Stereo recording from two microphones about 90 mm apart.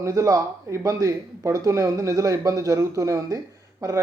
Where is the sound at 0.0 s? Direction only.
40° right (ahead or behind).